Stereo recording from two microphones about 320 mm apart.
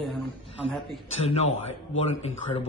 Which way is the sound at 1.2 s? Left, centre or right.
Centre.